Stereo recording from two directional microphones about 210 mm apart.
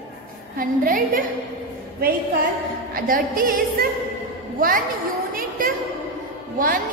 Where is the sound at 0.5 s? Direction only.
40° right (ahead or behind).